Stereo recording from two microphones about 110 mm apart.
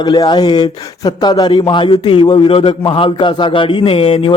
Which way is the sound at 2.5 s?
55° left (ahead or behind).